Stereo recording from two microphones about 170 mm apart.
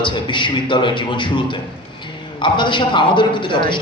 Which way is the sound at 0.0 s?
30° left (ahead or behind).